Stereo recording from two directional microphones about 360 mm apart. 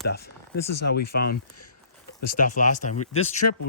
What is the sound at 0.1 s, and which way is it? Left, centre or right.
Speech, left.